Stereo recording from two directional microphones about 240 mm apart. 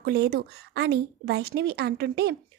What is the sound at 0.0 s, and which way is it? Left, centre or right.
A woman's voice, right.